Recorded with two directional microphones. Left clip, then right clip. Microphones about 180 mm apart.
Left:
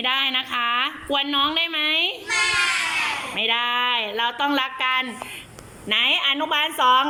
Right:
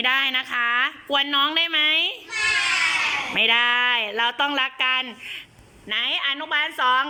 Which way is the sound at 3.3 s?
Centre (ahead or behind).